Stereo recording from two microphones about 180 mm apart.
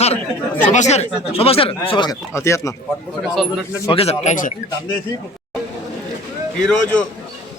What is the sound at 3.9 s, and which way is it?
Speech, 35° left (ahead or behind).